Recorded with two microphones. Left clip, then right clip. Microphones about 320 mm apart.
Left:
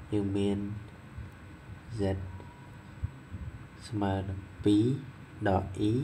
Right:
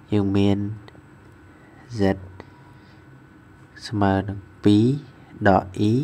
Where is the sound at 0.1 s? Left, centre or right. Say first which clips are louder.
Right 9 dB; right.